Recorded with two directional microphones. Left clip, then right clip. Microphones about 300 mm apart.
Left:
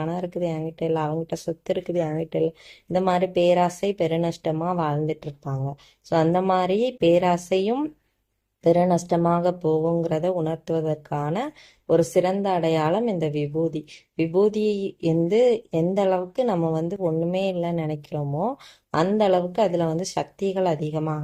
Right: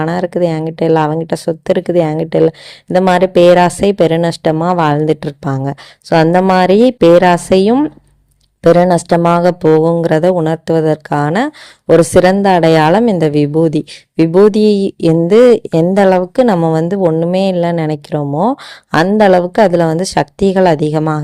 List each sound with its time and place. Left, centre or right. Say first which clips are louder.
0.0 s speech: right 13 dB; right